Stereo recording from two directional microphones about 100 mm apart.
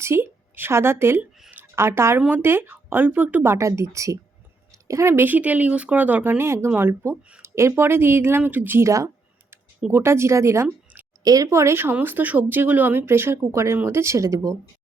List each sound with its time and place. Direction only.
0.0 s speech: 25° right (ahead or behind)
1.5 s a sound: 20° right (ahead or behind)
2.3 s speech: 20° right (ahead or behind)